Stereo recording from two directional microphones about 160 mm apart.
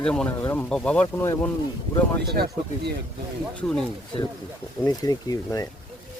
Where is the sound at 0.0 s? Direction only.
5° left (ahead or behind).